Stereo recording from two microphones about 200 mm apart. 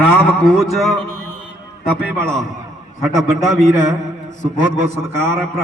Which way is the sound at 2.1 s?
5° left (ahead or behind).